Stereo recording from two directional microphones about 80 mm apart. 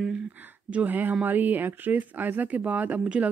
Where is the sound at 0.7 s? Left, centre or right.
Right.